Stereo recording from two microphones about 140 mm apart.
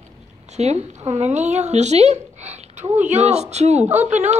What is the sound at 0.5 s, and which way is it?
A woman's voice, 50° right (ahead or behind).